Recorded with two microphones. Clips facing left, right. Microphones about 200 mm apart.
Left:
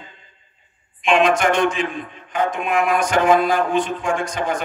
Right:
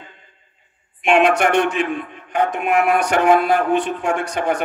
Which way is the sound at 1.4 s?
65° right (ahead or behind).